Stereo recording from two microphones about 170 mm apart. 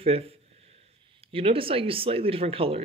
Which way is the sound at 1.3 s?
35° right (ahead or behind).